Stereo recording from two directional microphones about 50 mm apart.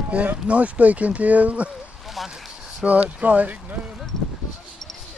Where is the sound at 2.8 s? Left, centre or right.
Right.